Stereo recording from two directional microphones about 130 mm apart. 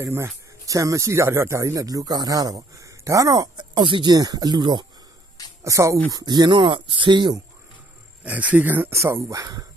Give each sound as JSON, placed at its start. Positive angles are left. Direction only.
{"t": 0.0, "sound": "speech", "side_deg": -20}
{"t": 5.6, "sound": "speech", "side_deg": -25}
{"t": 8.2, "sound": "speech", "side_deg": -10}